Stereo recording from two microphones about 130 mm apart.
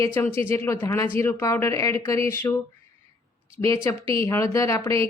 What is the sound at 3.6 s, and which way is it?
Speech, 20° left (ahead or behind).